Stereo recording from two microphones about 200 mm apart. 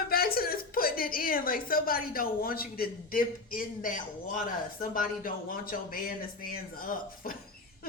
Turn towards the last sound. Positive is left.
turn(degrees=45)  # may be behind; listen again after turning